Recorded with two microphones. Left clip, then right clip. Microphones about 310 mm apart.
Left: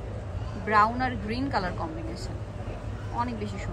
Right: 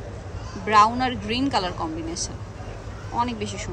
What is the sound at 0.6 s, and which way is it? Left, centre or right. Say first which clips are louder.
Speech: right 5 dB; centre.